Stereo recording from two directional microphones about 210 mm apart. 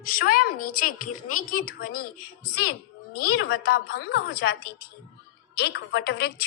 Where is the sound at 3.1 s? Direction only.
90° left.